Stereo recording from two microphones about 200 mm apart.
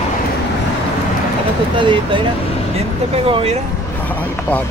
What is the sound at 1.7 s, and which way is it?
Speech, 25° right (ahead or behind).